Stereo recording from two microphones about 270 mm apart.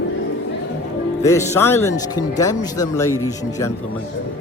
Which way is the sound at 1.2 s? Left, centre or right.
Centre.